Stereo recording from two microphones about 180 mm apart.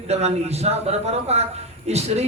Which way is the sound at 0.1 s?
35° right (ahead or behind).